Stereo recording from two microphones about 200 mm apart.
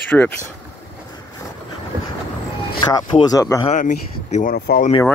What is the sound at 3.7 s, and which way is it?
Speech, 35° left (ahead or behind).